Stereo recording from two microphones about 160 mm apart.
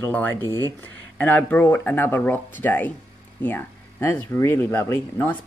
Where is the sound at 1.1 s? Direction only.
10° left (ahead or behind).